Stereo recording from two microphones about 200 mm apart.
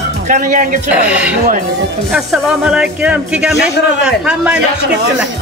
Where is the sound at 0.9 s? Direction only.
5° right (ahead or behind).